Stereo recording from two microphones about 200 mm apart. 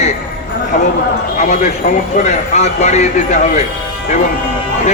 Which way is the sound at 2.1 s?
35° left (ahead or behind).